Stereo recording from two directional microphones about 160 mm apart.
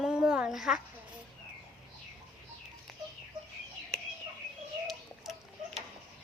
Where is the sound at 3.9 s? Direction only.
Centre (ahead or behind).